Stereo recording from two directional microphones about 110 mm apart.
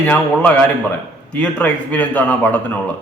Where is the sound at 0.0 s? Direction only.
15° left (ahead or behind).